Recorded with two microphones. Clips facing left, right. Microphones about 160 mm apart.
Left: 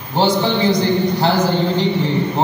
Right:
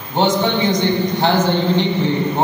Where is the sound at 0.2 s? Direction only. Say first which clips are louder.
Left 1 dB; 35° left (ahead or behind).